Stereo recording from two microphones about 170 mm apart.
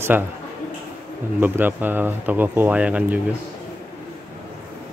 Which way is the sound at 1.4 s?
10° right (ahead or behind).